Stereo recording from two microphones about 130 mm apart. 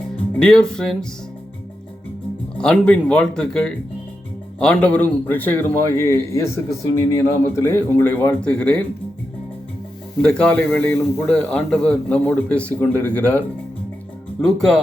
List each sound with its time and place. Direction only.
0.3 s speech: 5° left (ahead or behind)
2.6 s a man's voice: 5° left (ahead or behind)
10.2 s a man's voice: 5° left (ahead or behind)
14.4 s speech: centre (ahead or behind)